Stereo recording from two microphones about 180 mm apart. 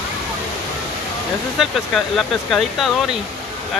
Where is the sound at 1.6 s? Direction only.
Centre (ahead or behind).